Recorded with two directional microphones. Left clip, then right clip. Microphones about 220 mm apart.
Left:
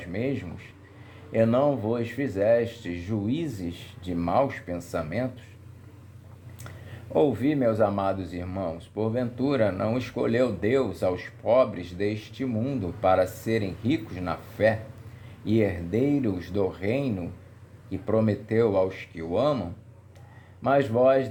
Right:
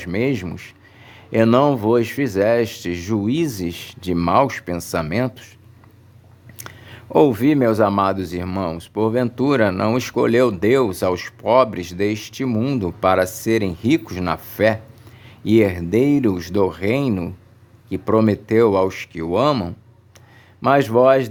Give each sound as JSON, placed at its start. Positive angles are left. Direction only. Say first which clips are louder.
{"t": 0.0, "sound": "speech", "louder": "right 9 dB", "side_deg": -40}
{"t": 6.6, "sound": "speech", "louder": "right 8 dB", "side_deg": -35}